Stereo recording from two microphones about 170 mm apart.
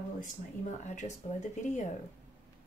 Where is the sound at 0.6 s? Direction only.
45° left (ahead or behind).